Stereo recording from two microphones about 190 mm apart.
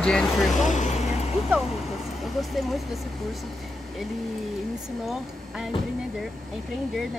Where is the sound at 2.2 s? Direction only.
Centre (ahead or behind).